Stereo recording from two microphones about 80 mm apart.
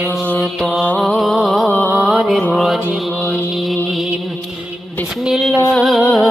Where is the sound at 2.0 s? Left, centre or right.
Centre.